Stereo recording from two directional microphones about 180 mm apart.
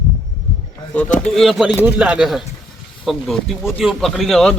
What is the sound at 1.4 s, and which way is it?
Speech, centre (ahead or behind).